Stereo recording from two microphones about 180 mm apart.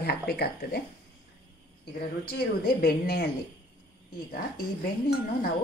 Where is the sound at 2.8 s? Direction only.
55° left (ahead or behind).